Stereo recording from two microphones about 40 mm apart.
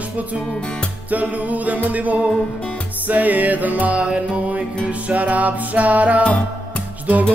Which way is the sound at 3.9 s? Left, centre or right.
Right.